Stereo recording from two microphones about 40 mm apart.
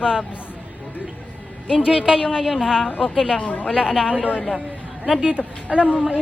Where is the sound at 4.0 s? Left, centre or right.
Right.